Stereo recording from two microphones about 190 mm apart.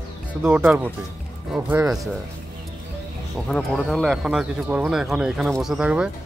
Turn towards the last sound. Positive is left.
turn(degrees=-5)  # may be behind; listen again after turning